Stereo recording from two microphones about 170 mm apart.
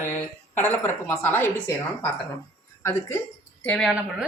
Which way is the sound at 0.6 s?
10° left (ahead or behind).